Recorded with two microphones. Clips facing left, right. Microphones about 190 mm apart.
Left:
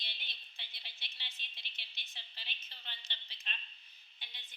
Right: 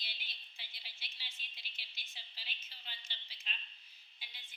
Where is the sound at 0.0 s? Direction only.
5° right (ahead or behind).